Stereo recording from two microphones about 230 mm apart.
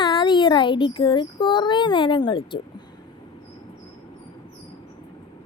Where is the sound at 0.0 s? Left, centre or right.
Centre.